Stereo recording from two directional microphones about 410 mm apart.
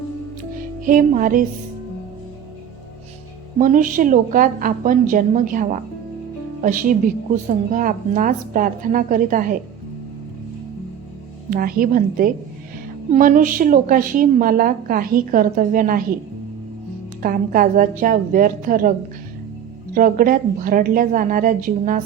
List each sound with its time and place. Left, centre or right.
0.9 s a woman's voice: centre
3.6 s a woman's voice: centre
11.5 s a woman's voice: right
17.2 s a woman's voice: centre